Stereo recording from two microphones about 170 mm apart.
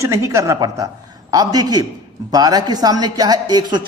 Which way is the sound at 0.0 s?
15° right (ahead or behind).